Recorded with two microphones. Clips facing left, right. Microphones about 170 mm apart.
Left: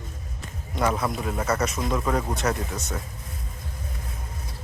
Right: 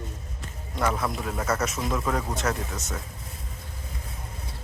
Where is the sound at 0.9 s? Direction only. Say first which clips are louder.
Left 2 dB; 5° left (ahead or behind).